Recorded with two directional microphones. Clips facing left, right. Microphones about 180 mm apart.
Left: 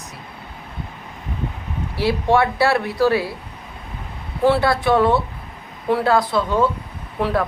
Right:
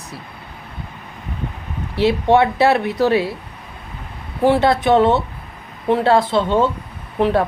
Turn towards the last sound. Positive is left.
turn(degrees=-20)  # may be behind; listen again after turning